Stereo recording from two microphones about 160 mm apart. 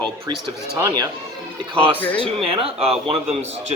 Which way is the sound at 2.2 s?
40° right (ahead or behind).